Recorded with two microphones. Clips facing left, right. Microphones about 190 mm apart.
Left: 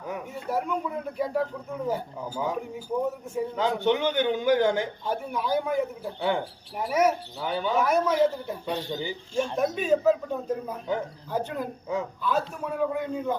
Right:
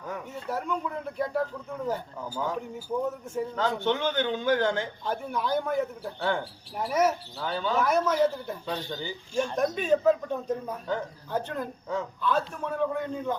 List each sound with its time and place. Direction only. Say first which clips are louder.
0.1 s speech: left 3 dB; 10° left (ahead or behind)
8.9 s speech: left 3 dB; 20° left (ahead or behind)
9.6 s speech: left 1 dB; 5° left (ahead or behind)